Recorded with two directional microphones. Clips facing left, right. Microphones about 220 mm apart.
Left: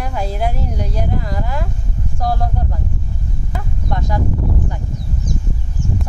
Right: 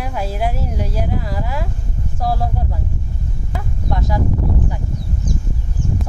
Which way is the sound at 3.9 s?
5° right (ahead or behind).